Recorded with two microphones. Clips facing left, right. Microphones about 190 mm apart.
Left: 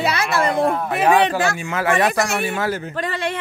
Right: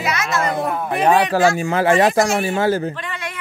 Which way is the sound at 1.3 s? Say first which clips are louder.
Right 5 dB; 35° right (ahead or behind).